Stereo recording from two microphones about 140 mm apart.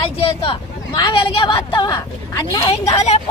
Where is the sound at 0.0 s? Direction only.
40° left (ahead or behind).